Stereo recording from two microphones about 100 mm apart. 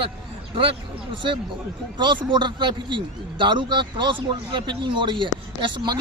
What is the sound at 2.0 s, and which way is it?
A man's voice, 50° right (ahead or behind).